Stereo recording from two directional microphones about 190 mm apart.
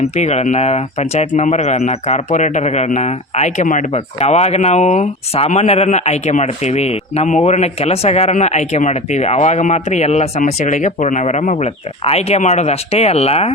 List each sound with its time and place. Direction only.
0.2 s speech: 35° left (ahead or behind)